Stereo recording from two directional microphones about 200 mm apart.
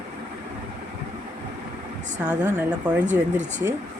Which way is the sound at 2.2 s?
10° right (ahead or behind).